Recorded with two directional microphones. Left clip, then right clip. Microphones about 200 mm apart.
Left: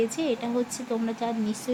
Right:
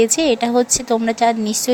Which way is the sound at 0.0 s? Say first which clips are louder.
Right 12 dB; 45° right (ahead or behind).